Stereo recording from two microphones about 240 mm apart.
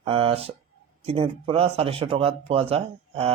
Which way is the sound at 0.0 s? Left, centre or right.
Right.